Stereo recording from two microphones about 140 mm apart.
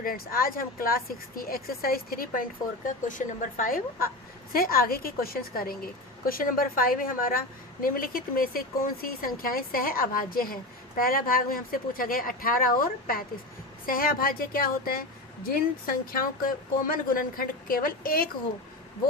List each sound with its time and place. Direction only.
0.0 s a woman's voice: 90° left